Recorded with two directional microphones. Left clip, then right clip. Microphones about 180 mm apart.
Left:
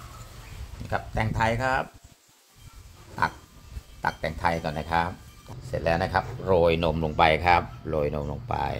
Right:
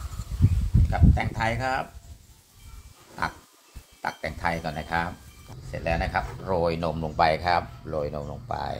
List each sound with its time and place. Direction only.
0.8 s speech: 40° left (ahead or behind)
3.2 s a sound: 40° left (ahead or behind)
4.0 s speech: 40° left (ahead or behind)